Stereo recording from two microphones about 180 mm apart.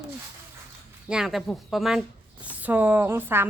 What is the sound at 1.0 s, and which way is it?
A woman's voice, 5° right (ahead or behind).